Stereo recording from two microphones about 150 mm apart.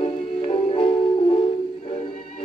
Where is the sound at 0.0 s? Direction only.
40° left (ahead or behind).